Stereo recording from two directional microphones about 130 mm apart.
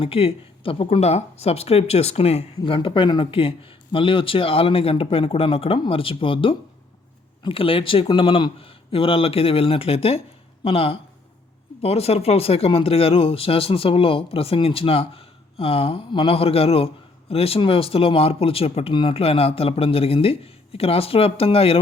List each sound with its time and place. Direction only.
0.0 s speech: 45° left (ahead or behind)